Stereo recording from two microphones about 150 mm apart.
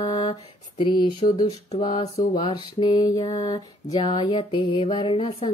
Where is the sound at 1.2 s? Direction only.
50° left (ahead or behind).